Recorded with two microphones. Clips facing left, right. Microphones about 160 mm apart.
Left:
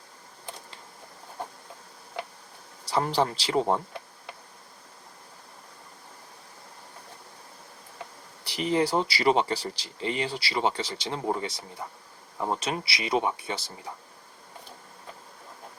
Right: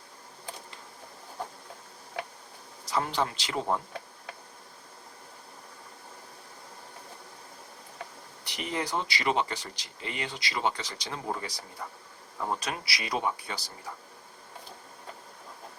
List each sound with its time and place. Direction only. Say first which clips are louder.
2.8 s speech: left 4 dB; 35° left (ahead or behind)
8.4 s speech: left 8 dB; 30° left (ahead or behind)